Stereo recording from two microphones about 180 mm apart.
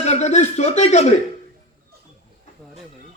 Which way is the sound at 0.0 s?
40° left (ahead or behind).